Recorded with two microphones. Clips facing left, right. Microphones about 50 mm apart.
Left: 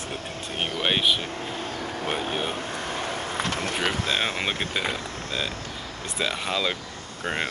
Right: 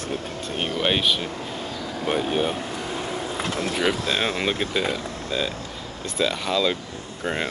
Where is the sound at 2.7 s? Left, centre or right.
Left.